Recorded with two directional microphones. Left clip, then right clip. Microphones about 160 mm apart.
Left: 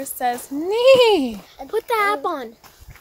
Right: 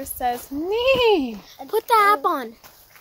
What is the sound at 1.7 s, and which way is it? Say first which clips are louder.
Speech: right 3 dB; 60° right (ahead or behind).